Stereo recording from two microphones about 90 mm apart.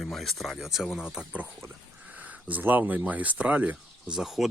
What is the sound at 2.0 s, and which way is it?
Speech, 15° right (ahead or behind).